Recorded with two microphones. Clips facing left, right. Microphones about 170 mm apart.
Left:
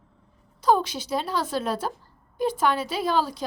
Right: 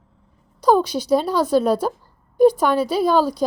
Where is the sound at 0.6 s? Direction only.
40° right (ahead or behind).